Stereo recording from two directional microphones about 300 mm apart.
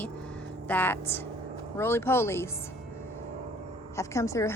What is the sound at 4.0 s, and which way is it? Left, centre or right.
Speech, centre.